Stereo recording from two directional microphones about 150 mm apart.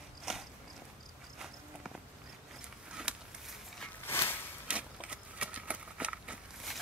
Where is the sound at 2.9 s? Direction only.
5° right (ahead or behind).